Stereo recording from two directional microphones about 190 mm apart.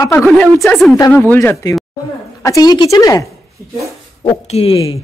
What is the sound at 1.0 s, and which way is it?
A man's voice, 15° left (ahead or behind).